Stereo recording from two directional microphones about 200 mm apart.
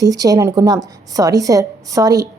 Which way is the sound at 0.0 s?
15° right (ahead or behind).